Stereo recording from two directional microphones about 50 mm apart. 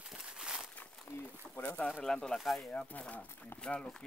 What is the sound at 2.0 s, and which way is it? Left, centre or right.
Speech, centre.